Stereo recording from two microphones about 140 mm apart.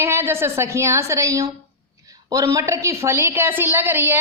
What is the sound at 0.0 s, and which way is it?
A woman's voice, 20° right (ahead or behind).